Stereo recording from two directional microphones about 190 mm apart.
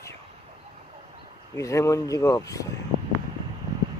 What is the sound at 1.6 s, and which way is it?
Speech, 15° left (ahead or behind).